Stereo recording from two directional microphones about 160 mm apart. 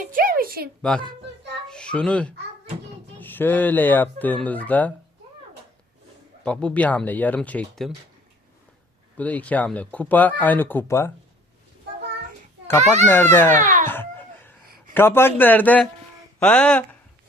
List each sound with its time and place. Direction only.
0.0 s a sound: 60° right (ahead or behind)
0.8 s a child's voice: 5° left (ahead or behind)
6.4 s speech: 5° left (ahead or behind)
9.1 s speech: 10° left (ahead or behind)
13.3 s speech: 15° left (ahead or behind)
13.6 s a child's voice: 55° right (ahead or behind)
13.8 s a sound: 15° left (ahead or behind)
14.9 s speech: 15° left (ahead or behind)